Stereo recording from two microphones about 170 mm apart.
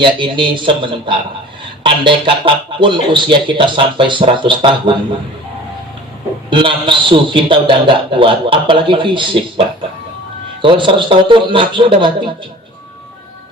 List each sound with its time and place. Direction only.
0.0 s speech: 30° right (ahead or behind)
6.5 s speech: 30° right (ahead or behind)